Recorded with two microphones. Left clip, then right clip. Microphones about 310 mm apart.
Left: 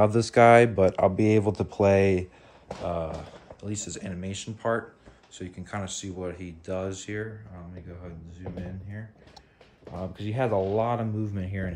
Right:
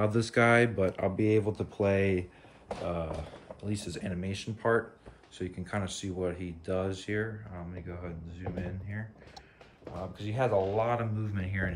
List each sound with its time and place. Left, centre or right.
0.0 s speech: centre
3.6 s speech: centre
10.1 s speech: left; by 11.7 s centre